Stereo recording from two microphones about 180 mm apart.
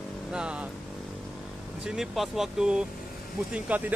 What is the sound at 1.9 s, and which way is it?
Speech, centre (ahead or behind).